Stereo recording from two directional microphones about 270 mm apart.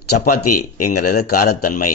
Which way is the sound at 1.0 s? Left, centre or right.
Left.